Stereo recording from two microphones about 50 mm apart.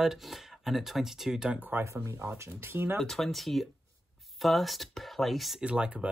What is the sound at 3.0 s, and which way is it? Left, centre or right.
Speech, centre.